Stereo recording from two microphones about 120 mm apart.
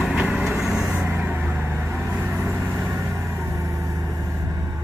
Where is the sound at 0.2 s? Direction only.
5° right (ahead or behind).